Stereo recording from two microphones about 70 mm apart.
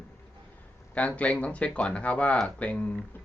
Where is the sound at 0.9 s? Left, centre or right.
Centre.